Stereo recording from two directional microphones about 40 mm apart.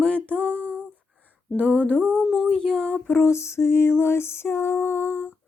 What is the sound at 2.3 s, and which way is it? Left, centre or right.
Child singing, centre.